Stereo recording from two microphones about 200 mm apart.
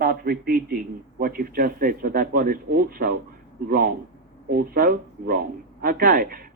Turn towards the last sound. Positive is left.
turn(degrees=-45)  # may be behind; listen again after turning